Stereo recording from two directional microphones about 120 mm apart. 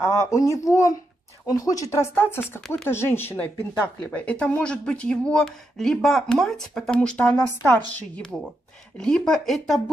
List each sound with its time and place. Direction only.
0.0 s speech: 25° left (ahead or behind)
9.0 s speech: 5° left (ahead or behind)